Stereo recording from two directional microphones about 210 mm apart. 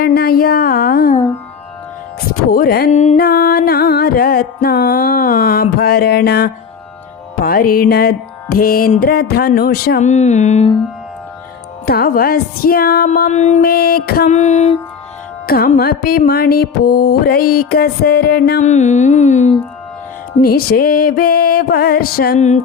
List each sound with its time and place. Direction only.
0.0 s a sound: 45° left (ahead or behind)
2.5 s music: 45° left (ahead or behind)
2.9 s music: 35° left (ahead or behind)
3.2 s music: 45° left (ahead or behind)
10.0 s music: 35° left (ahead or behind)
11.9 s music: 45° left (ahead or behind)
14.3 s music: 35° left (ahead or behind)
15.4 s music: 45° left (ahead or behind)
18.6 s music: 35° left (ahead or behind)
20.4 s music: 45° left (ahead or behind)
22.4 s music: 35° left (ahead or behind)